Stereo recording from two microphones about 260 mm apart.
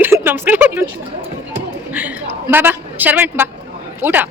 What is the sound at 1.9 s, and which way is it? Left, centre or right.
A man's voice, centre.